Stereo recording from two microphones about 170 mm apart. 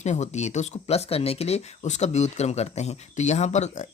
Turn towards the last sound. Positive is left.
turn(degrees=45)  # may be behind; listen again after turning